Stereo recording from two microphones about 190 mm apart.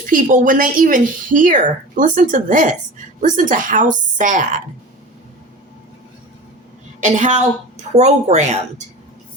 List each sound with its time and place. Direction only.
0.0 s speech: 45° right (ahead or behind)
7.0 s a woman's voice: 40° right (ahead or behind)